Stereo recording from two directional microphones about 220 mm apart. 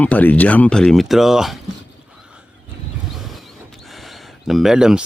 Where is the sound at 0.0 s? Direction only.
5° left (ahead or behind).